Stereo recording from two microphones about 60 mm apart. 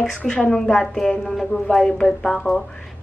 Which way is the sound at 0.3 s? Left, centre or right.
Centre.